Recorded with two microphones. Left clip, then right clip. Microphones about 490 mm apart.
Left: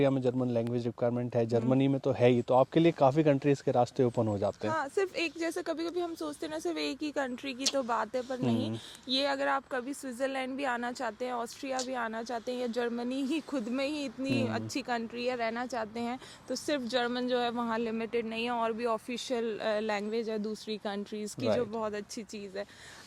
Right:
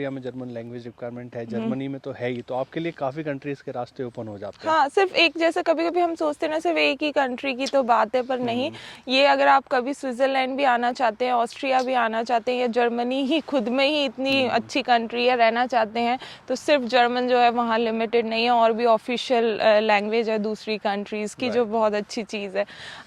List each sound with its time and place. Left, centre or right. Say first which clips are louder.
0.0 s a man's voice: left 3 dB; left
4.6 s speech: right 12 dB; right